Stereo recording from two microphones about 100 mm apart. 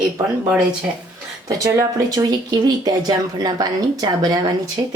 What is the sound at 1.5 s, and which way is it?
Speech, 35° right (ahead or behind).